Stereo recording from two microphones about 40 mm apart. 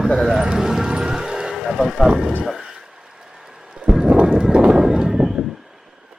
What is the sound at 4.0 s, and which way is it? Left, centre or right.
Run, right.